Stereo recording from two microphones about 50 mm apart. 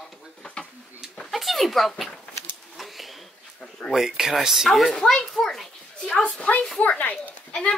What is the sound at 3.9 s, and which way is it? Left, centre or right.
A child's voice, centre.